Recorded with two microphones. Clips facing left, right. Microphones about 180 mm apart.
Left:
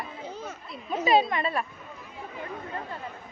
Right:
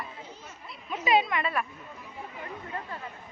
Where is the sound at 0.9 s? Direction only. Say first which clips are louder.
Left 3 dB; 35° left (ahead or behind).